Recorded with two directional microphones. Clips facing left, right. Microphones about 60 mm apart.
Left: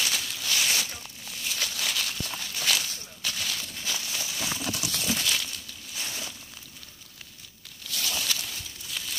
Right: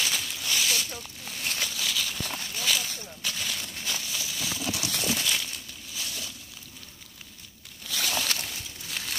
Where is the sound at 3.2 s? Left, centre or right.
Centre.